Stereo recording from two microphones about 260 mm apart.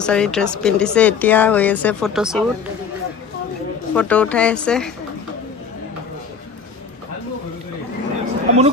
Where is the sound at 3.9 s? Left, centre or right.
Centre.